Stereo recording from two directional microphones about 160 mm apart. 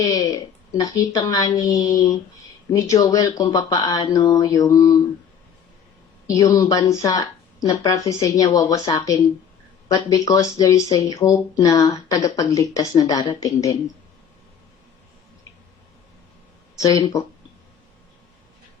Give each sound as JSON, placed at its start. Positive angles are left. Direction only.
{"t": 0.0, "sound": "speech", "side_deg": 25}
{"t": 6.2, "sound": "speech", "side_deg": 20}
{"t": 16.8, "sound": "speech", "side_deg": 20}